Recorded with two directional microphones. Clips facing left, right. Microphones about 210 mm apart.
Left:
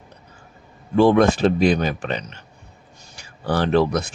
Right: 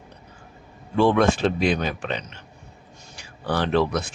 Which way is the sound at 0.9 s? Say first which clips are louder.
Left 4 dB; 40° left (ahead or behind).